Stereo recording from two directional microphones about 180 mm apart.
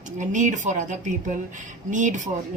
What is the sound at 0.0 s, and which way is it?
Speech, 45° right (ahead or behind).